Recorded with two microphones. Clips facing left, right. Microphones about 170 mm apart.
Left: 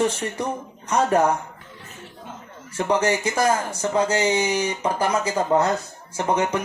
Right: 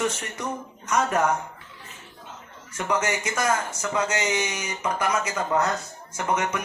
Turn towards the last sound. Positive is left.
turn(degrees=30)  # may be behind; listen again after turning